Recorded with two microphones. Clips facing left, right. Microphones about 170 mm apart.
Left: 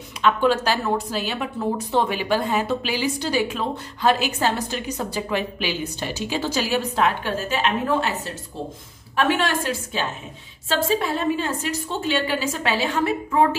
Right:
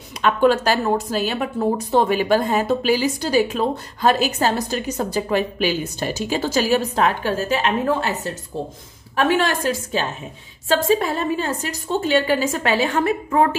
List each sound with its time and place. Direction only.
0.2 s a woman's voice: 45° right (ahead or behind)
9.1 s a woman's voice: 40° right (ahead or behind)